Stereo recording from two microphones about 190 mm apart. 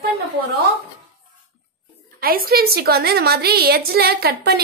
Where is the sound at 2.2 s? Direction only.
50° right (ahead or behind).